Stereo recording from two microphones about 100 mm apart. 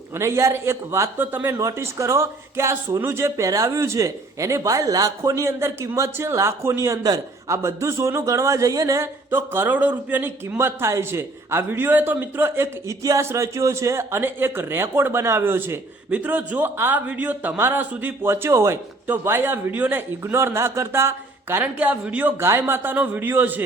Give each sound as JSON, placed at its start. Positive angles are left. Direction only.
{"t": 0.2, "sound": "a man's voice", "side_deg": -30}
{"t": 1.5, "sound": "speech", "side_deg": -30}
{"t": 9.3, "sound": "a man's voice", "side_deg": -20}
{"t": 13.0, "sound": "a man's voice", "side_deg": -35}